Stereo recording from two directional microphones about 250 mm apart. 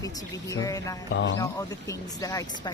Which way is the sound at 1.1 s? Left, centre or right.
Left.